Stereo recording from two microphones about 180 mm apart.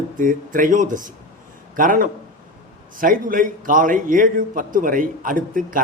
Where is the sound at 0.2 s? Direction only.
50° right (ahead or behind).